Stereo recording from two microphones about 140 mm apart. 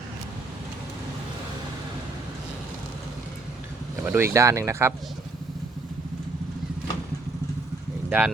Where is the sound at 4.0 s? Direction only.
15° right (ahead or behind).